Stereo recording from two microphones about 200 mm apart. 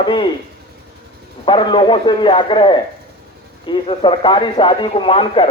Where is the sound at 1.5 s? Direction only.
25° left (ahead or behind).